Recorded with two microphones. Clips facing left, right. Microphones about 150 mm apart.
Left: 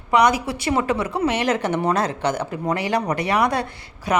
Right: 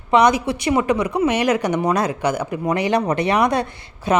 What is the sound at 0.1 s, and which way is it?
Speech, 20° right (ahead or behind).